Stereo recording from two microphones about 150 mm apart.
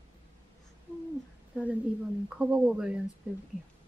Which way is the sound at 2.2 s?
5° right (ahead or behind).